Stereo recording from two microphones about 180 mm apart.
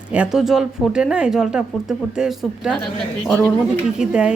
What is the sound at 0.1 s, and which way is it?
Speech, 5° right (ahead or behind).